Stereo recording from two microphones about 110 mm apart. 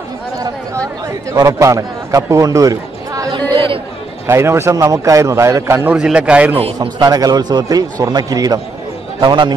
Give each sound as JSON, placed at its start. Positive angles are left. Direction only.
{"t": 1.3, "sound": "a man's voice", "side_deg": -30}
{"t": 3.5, "sound": "chatter", "side_deg": -50}
{"t": 4.3, "sound": "a man's voice", "side_deg": -25}
{"t": 5.9, "sound": "a man's voice", "side_deg": -5}
{"t": 7.0, "sound": "a man's voice", "side_deg": -35}